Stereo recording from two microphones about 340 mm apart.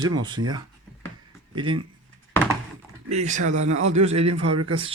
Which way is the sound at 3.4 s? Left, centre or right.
Right.